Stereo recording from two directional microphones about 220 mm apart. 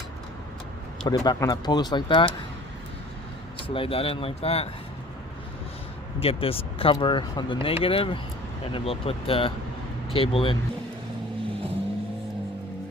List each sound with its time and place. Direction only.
1.0 s speech: 15° left (ahead or behind)
3.7 s speech: 25° left (ahead or behind)
6.1 s speech: 25° left (ahead or behind)